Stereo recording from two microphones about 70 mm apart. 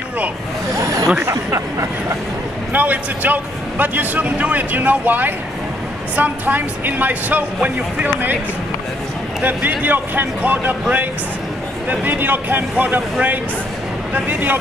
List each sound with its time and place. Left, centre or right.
0.7 s a sound: right
1.2 s speech: right
2.7 s speech: right
9.4 s speech: right
14.1 s speech: right